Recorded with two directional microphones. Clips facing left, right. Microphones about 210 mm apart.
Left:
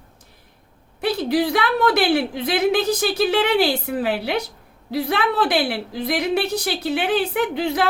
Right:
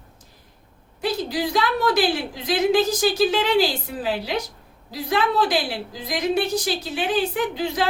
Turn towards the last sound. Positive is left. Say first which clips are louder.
# left 3 dB
turn(degrees=60)  # may be behind; listen again after turning